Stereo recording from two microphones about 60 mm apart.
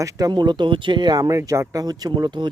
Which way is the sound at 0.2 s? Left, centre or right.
Right.